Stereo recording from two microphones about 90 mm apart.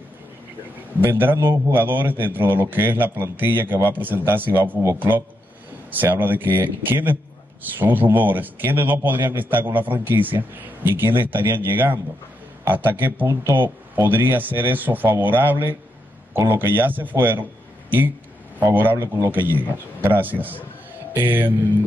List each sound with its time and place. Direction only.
1.0 s a man's voice: 20° right (ahead or behind)
13.3 s speech: 35° right (ahead or behind)
13.6 s a man's voice: 25° right (ahead or behind)